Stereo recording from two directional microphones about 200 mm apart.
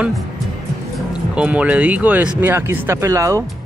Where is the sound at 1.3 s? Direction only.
5° right (ahead or behind).